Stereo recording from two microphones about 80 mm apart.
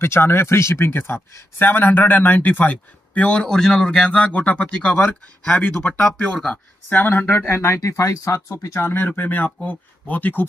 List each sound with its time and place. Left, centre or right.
0.0 s speech: left
7.3 s speech: left